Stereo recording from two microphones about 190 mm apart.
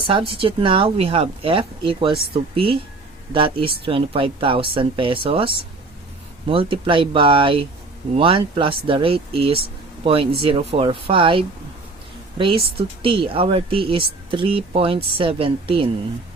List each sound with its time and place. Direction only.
0.1 s speech: 30° right (ahead or behind)